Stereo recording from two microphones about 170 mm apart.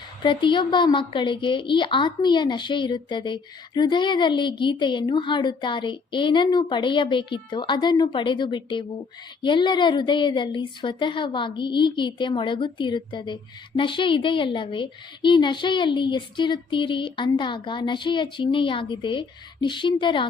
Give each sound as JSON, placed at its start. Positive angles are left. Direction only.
{"t": 0.2, "sound": "a woman's voice", "side_deg": 30}